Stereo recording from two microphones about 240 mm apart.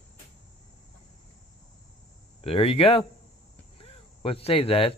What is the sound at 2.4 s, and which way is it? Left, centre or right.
Speech, left.